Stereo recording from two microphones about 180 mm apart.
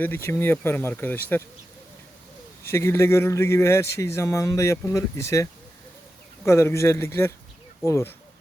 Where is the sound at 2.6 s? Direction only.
15° left (ahead or behind).